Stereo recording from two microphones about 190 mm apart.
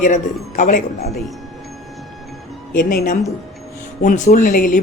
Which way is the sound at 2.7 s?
45° left (ahead or behind).